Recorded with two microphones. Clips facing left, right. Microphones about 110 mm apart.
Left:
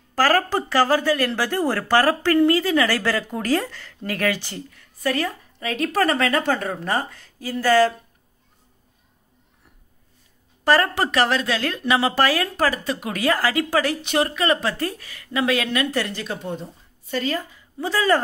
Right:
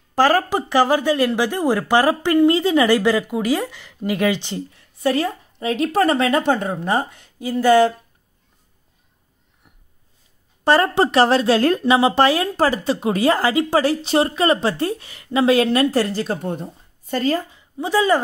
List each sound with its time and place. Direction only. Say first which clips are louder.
0.1 s speech: right 3 dB; 20° right (ahead or behind)
10.6 s speech: right 3 dB; 25° right (ahead or behind); by 17.4 s 40° right (ahead or behind)
17.4 s a woman's voice: right 2 dB; 20° right (ahead or behind)